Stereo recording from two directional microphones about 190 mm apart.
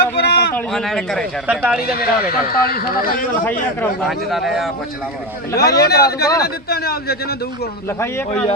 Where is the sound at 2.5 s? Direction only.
50° left (ahead or behind).